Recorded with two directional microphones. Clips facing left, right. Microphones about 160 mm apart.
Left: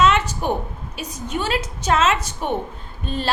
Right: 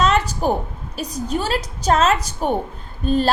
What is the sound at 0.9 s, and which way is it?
A woman's voice, 35° right (ahead or behind).